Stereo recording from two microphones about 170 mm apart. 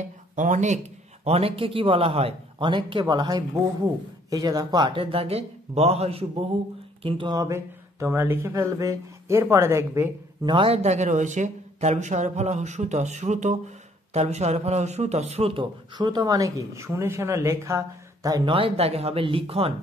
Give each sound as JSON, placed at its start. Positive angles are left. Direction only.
{"t": 0.0, "sound": "speech", "side_deg": -45}
{"t": 10.4, "sound": "speech", "side_deg": -30}